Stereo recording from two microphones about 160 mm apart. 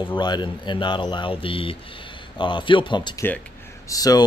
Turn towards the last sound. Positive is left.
turn(degrees=25)  # may be behind; listen again after turning